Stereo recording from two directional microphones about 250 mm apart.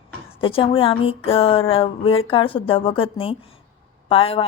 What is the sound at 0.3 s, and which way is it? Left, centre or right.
A woman's voice, left.